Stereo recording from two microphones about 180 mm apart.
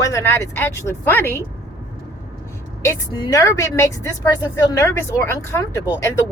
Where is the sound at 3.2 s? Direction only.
20° left (ahead or behind).